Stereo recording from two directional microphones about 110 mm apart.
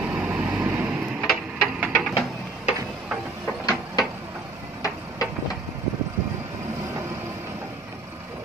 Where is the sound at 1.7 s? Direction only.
10° right (ahead or behind).